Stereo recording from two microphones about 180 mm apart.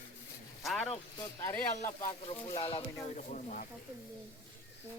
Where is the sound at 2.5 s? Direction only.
30° left (ahead or behind).